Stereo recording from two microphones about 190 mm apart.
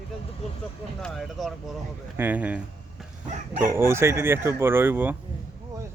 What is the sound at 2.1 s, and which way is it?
Speech, 10° right (ahead or behind).